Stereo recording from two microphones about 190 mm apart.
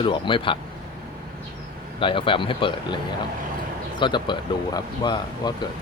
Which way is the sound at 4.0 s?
25° left (ahead or behind).